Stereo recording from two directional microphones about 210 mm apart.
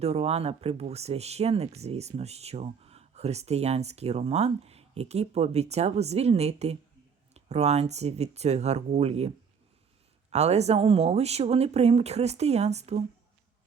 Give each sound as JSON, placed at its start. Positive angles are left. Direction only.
{"t": 0.0, "sound": "speech", "side_deg": -30}